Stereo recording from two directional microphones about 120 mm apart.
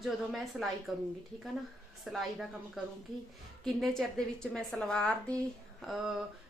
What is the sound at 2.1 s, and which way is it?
A woman's voice, centre (ahead or behind).